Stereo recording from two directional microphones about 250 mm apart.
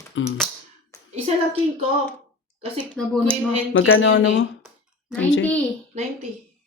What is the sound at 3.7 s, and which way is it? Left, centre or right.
Speech, left.